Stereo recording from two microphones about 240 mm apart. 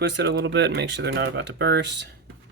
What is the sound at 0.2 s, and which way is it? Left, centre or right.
Speech, right.